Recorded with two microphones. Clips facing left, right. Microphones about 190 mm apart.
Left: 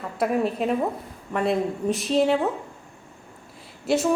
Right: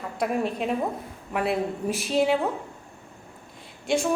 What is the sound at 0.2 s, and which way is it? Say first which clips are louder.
A woman's voice: left 3 dB; centre (ahead or behind).